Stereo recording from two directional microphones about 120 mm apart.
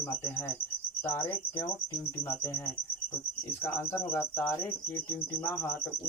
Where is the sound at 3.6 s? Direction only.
20° left (ahead or behind).